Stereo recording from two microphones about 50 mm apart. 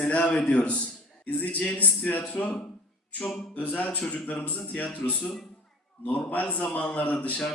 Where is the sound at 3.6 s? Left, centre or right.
Left.